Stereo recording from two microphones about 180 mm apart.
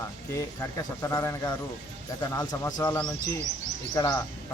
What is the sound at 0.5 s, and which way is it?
Speech, 15° left (ahead or behind).